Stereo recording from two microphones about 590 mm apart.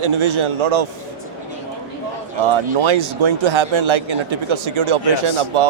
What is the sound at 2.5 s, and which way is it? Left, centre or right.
A man's voice, right.